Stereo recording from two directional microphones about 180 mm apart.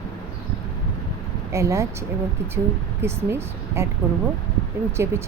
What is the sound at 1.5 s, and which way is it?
Speech, 15° right (ahead or behind).